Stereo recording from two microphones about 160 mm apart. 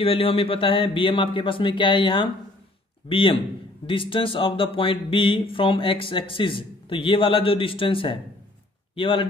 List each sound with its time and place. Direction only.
0.0 s speech: 35° left (ahead or behind)